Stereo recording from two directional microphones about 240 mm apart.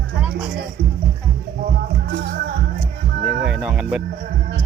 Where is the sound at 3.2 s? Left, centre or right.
Right.